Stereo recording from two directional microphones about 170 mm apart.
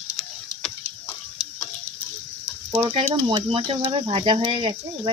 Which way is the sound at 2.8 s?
35° right (ahead or behind).